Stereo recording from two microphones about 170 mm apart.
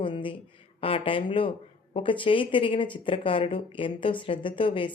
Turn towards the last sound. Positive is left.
turn(degrees=30)  # may be behind; listen again after turning